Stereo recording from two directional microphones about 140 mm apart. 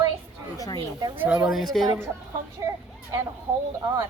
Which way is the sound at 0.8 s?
35° right (ahead or behind).